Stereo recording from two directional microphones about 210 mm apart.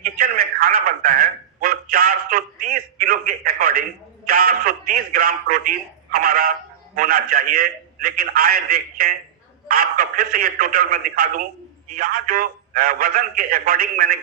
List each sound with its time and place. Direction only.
0.0 s a man's voice: 45° right (ahead or behind)